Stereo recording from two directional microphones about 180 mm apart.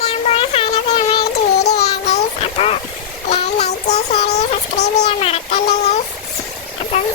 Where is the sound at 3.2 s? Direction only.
40° left (ahead or behind).